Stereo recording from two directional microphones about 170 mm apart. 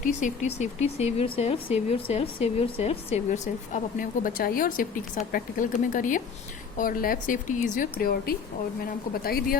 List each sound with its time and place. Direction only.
0.0 s a woman's voice: 45° left (ahead or behind); by 9.6 s 60° left (ahead or behind)